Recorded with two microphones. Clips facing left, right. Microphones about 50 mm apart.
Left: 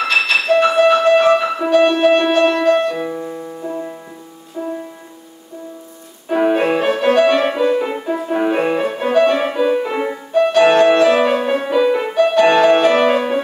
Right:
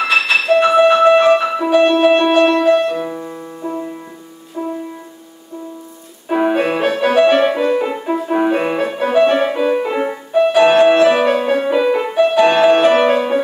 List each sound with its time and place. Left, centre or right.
0.1 s music: centre
2.5 s music: centre
4.6 s music: centre
6.2 s music: centre